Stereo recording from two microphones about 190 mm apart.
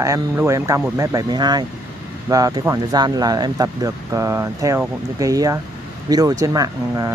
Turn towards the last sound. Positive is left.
turn(degrees=-20)  # may be behind; listen again after turning